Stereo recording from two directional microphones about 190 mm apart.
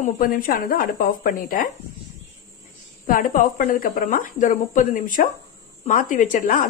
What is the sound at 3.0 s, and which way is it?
A woman's voice, 45° left (ahead or behind).